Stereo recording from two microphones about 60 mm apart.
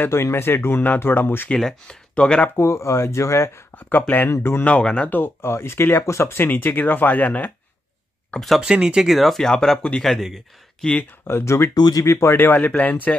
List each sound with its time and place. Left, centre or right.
0.1 s speech: left
1.6 s speech: centre
2.1 s speech: centre
2.5 s speech: left
4.3 s speech: left
4.6 s speech: centre
5.1 s speech: left
8.5 s speech: centre
10.8 s speech: centre
11.2 s speech: left
12.3 s speech: left